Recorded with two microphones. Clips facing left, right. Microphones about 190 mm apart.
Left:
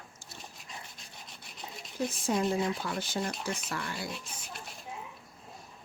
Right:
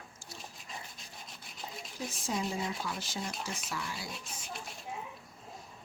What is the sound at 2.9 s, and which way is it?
Speech, centre (ahead or behind).